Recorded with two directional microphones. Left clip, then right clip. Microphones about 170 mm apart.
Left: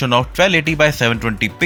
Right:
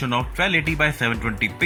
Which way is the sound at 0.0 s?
45° left (ahead or behind).